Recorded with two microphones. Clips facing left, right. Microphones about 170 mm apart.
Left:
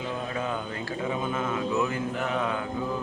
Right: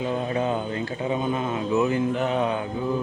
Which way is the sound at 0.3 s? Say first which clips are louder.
Right 6 dB; 20° right (ahead or behind).